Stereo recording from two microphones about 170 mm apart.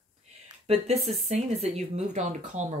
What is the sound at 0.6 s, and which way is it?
Speech, 40° right (ahead or behind).